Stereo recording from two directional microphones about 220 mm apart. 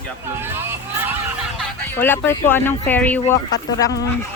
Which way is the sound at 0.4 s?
10° right (ahead or behind).